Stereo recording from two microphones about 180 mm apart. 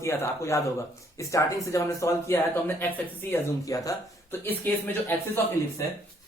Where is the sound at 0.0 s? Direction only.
15° left (ahead or behind).